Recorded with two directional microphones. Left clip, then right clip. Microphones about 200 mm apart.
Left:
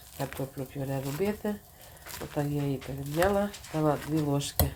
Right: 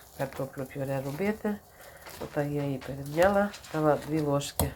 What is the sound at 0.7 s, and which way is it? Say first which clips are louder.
Speech: even; 5° left (ahead or behind).